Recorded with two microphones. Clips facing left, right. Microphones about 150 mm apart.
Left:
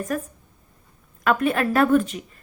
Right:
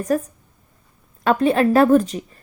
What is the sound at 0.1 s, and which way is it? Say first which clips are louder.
A woman's voice: right 6 dB; 35° right (ahead or behind).